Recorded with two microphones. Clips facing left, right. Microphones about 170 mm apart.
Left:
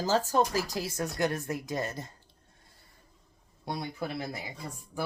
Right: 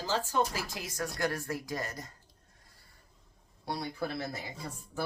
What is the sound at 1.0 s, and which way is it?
Speech, 20° left (ahead or behind).